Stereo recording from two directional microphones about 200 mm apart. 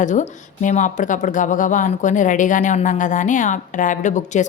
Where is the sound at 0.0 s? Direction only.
40° left (ahead or behind).